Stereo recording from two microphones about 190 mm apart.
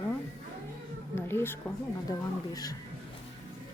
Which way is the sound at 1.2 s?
10° left (ahead or behind).